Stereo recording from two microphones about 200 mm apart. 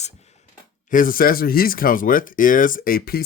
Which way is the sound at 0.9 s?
45° left (ahead or behind).